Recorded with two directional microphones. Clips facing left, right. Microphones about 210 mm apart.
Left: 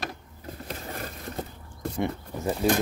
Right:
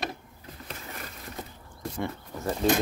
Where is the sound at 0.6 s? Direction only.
40° left (ahead or behind).